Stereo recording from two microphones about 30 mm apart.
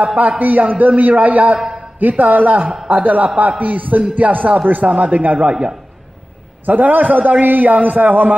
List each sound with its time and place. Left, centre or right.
0.4 s a man's voice: right
5.1 s a man's voice: right
5.5 s a man's voice: right
6.6 s a man's voice: right